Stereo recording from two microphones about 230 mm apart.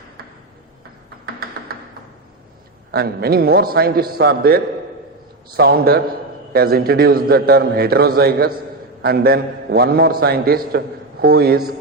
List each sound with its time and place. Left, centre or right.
1.2 s tap: right
2.9 s a man's voice: right